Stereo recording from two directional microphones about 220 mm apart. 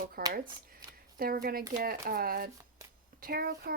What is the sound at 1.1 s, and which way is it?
Speech, 40° right (ahead or behind).